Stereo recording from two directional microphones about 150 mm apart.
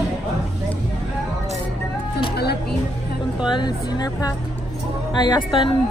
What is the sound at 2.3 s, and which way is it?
Speech, 90° left.